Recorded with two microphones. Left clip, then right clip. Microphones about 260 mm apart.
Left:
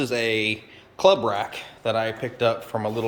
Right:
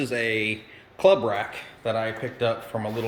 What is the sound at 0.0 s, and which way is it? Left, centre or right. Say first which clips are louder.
Speech: left 2 dB; centre.